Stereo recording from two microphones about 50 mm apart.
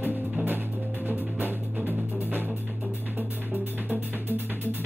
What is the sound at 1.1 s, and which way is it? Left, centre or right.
Music, right.